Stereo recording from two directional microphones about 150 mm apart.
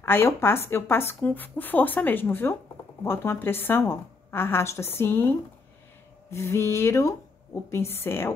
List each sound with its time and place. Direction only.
0.0 s a woman's voice: 15° left (ahead or behind)
6.3 s a woman's voice: 15° left (ahead or behind)